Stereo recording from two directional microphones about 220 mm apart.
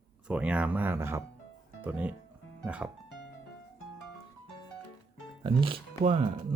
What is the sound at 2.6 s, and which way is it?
Music, 5° right (ahead or behind).